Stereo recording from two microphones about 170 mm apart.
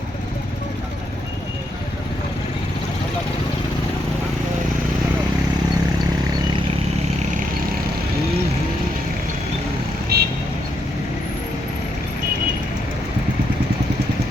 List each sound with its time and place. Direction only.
10.1 s vehicle: 65° right (ahead or behind)